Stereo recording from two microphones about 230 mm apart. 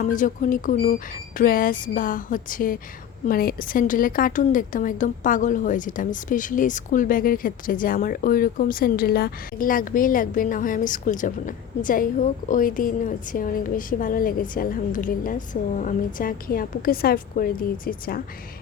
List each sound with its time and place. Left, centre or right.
0.0 s a woman's voice: left